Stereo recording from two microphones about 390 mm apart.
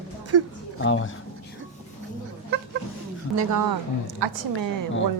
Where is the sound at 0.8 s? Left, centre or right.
Left.